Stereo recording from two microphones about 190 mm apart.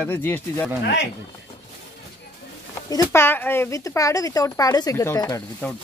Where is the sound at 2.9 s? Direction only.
15° left (ahead or behind).